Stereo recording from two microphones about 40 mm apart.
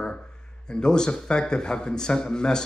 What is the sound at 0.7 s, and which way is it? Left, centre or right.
Speech, left.